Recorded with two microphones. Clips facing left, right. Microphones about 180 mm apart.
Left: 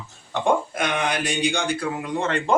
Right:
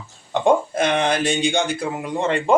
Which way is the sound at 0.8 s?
30° right (ahead or behind).